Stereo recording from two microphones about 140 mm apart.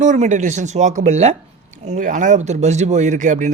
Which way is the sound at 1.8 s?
65° right (ahead or behind).